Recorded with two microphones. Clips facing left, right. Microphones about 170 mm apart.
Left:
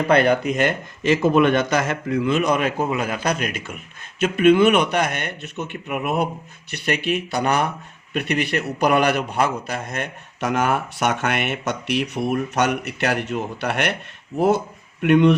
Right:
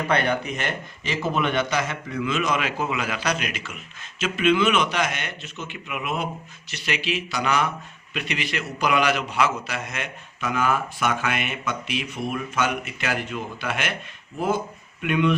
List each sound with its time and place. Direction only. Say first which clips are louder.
0.1 s speech: left 7 dB; 40° left (ahead or behind)
1.0 s a man's voice: left 9 dB; 50° left (ahead or behind); by 15.4 s 65° left (ahead or behind)